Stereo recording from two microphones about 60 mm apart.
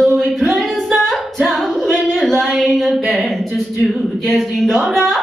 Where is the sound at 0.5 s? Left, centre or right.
Centre.